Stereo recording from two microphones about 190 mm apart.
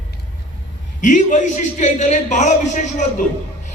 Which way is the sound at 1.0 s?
40° left (ahead or behind).